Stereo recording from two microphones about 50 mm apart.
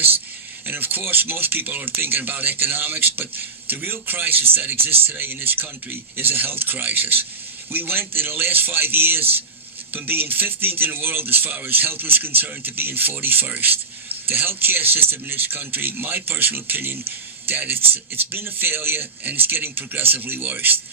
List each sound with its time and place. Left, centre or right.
0.6 s speech: right